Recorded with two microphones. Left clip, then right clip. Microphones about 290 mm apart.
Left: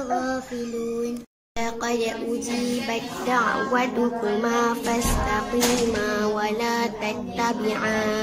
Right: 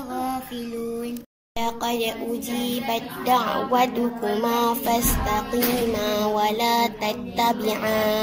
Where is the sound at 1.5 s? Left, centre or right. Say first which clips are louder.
Right 1 dB; centre.